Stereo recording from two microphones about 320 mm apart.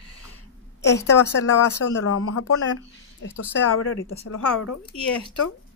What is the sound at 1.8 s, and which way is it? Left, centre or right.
Speech, left.